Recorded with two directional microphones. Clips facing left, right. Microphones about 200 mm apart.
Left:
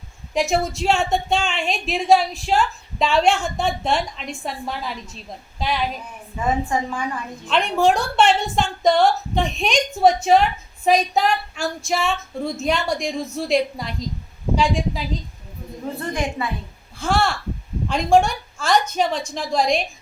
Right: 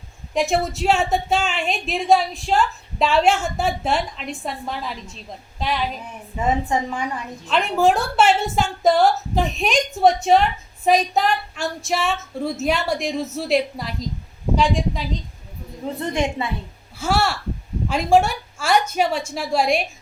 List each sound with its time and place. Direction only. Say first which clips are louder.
0.3 s a woman's voice: even; centre (ahead or behind)
6.3 s a woman's voice: right 1 dB; 20° right (ahead or behind)
7.4 s a woman's voice: even; centre (ahead or behind)
16.0 s a woman's voice: right 3 dB; 25° right (ahead or behind)
17.0 s a woman's voice: even; 5° right (ahead or behind)